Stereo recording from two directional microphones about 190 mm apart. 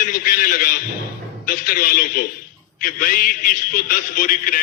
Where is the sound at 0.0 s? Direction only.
45° left (ahead or behind).